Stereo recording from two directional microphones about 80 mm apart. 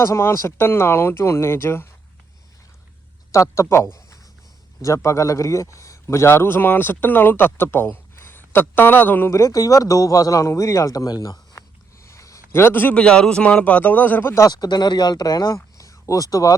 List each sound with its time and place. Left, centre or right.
0.0 s speech: left
3.3 s a man's voice: left
9.3 s speech: left
12.0 s a sound: left
12.5 s a man's voice: left
14.5 s speech: left